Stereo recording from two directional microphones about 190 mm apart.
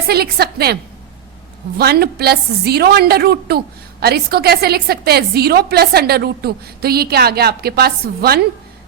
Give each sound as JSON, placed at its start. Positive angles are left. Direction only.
{"t": 0.1, "sound": "a woman's voice", "side_deg": -55}
{"t": 1.8, "sound": "a woman's voice", "side_deg": -55}